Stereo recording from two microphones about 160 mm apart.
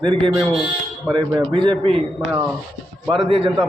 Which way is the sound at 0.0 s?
30° right (ahead or behind).